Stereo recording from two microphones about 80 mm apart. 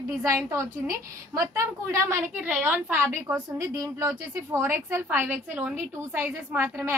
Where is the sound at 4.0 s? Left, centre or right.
Right.